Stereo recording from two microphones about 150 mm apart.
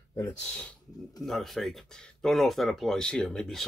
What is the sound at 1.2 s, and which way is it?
Speech, centre (ahead or behind).